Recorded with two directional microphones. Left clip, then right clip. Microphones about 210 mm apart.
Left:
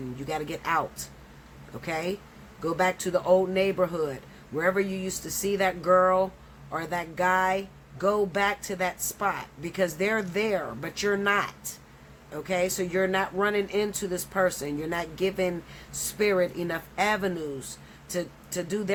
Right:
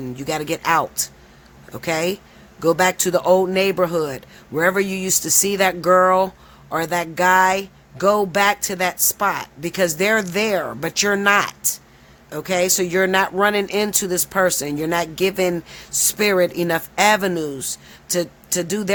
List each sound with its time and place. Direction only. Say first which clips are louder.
0.2 s a man's voice: right 9 dB; 55° right (ahead or behind)